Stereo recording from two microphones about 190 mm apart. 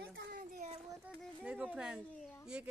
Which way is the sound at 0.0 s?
45° right (ahead or behind).